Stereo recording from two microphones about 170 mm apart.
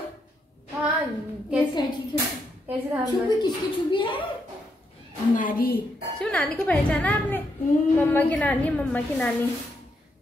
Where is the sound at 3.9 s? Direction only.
30° left (ahead or behind).